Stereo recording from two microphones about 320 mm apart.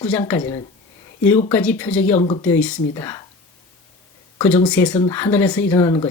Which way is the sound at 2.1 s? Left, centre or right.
Centre.